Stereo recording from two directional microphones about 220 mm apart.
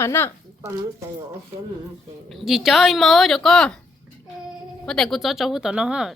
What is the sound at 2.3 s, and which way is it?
Speech, centre (ahead or behind).